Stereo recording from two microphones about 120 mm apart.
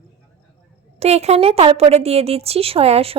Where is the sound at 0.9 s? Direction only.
60° right (ahead or behind).